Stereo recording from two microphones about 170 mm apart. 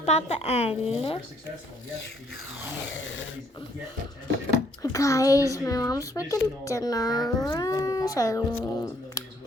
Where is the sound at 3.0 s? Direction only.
90° left.